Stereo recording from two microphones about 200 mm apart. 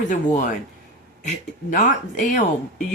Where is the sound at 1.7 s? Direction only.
40° left (ahead or behind).